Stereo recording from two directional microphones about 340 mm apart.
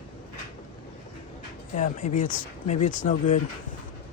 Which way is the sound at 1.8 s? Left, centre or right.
Left.